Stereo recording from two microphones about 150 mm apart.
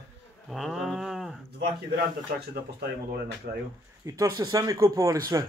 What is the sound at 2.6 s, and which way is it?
Speech, 90° right.